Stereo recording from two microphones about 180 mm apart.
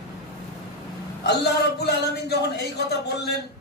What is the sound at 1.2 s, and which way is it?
A man's voice, 65° left (ahead or behind).